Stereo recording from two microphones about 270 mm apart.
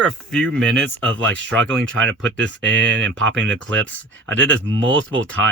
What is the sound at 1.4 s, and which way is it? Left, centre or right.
Speech, right.